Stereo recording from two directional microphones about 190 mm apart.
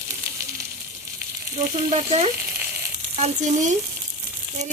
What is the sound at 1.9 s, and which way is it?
Sizzle, 35° right (ahead or behind).